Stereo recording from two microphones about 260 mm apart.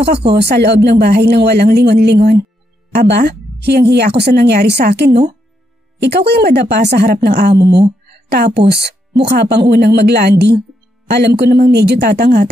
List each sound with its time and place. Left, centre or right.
0.3 s speech: right